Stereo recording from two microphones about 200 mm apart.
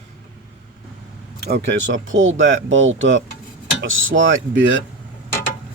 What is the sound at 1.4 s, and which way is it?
Speech, 55° right (ahead or behind).